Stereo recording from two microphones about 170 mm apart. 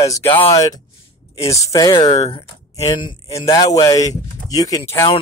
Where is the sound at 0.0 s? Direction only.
15° left (ahead or behind).